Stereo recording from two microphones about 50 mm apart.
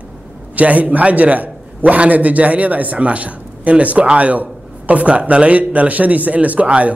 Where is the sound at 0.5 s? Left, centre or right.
Right.